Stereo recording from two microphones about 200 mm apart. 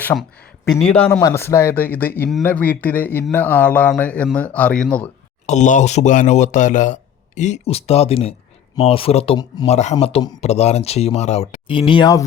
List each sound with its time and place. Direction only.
0.0 s speech: 10° left (ahead or behind)
5.5 s speech: 35° left (ahead or behind); by 12.2 s 20° left (ahead or behind)